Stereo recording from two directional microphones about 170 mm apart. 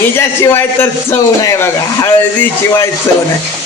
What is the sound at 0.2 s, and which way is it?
Speech, 15° left (ahead or behind).